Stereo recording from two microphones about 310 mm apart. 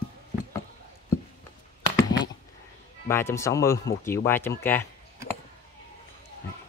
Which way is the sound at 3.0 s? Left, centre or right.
Centre.